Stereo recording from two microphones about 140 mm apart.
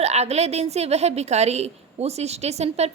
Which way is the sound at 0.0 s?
50° right (ahead or behind).